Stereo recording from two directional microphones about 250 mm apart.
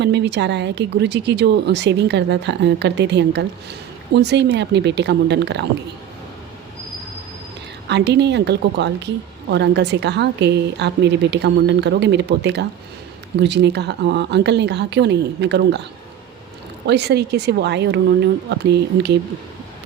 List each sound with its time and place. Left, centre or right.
0.0 s speech: right
7.9 s speech: right